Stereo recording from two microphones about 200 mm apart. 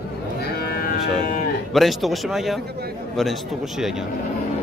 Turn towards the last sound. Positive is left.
turn(degrees=0)  # may be behind; listen again after turning